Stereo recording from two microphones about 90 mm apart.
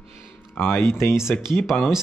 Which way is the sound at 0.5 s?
25° left (ahead or behind).